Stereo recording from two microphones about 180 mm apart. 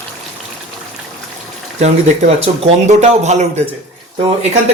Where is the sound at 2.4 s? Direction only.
40° right (ahead or behind).